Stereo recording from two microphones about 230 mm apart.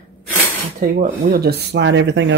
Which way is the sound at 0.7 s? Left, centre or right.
Right.